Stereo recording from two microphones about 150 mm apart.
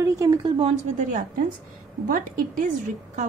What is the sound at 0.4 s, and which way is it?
Speech, 40° right (ahead or behind).